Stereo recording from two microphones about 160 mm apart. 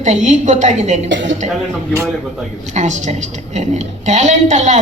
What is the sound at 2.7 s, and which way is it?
Speech, 50° right (ahead or behind).